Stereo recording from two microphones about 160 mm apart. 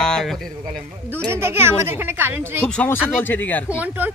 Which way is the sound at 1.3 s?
15° right (ahead or behind).